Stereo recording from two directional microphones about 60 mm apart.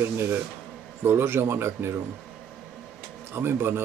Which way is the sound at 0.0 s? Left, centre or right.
Right.